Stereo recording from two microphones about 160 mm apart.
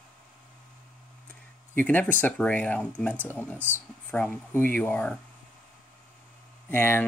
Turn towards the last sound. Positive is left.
turn(degrees=15)  # may be behind; listen again after turning